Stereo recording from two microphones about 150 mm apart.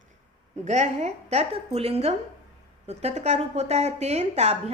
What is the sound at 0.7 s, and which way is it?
Speech, 50° right (ahead or behind).